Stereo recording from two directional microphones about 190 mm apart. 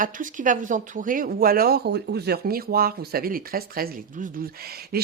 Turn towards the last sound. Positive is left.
turn(degrees=-50)  # may be behind; listen again after turning